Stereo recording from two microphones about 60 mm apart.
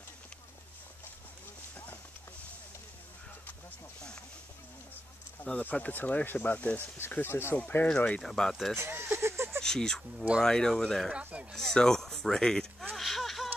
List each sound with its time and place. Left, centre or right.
5.4 s speech: left
7.1 s speech: left
7.9 s speech: centre
8.2 s speech: centre
8.7 s speech: right
9.2 s a sound: right
9.6 s speech: centre
11.1 s speech: centre
11.5 s speech: centre
12.9 s a sound: centre